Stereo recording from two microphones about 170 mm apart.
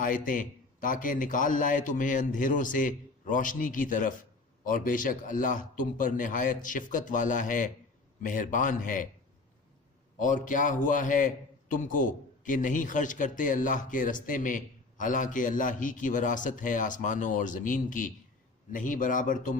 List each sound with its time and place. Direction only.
0.0 s a man's voice: 50° left (ahead or behind)
10.2 s a man's voice: 50° left (ahead or behind)